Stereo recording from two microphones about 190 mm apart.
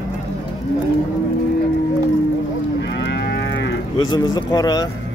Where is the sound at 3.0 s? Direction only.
60° left (ahead or behind).